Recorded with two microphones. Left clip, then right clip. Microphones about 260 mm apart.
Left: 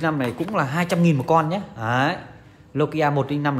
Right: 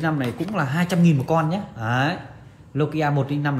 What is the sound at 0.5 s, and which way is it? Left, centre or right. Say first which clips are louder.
Speech: left 3 dB; left.